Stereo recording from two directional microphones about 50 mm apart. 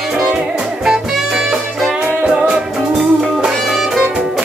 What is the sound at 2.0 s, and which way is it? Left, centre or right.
Music, right.